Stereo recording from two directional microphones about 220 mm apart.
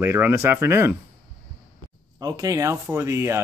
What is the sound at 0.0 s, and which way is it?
Speech, 10° right (ahead or behind).